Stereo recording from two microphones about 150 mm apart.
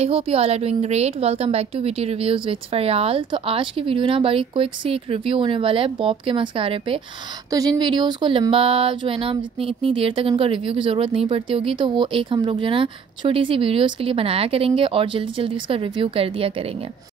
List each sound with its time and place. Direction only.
0.0 s speech: 40° right (ahead or behind)